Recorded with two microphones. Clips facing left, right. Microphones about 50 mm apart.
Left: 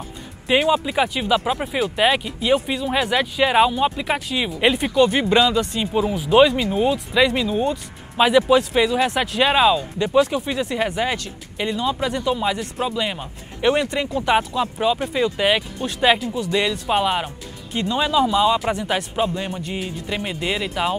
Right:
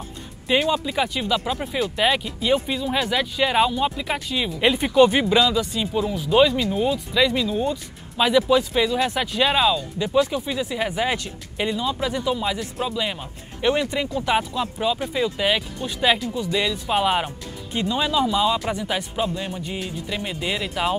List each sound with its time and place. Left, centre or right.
0.5 s speech: centre
4.9 s speech: centre
5.3 s speech: centre
10.0 s speech: centre